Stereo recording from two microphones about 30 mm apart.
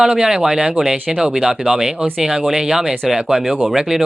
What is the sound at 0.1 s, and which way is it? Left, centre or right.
Speech, right.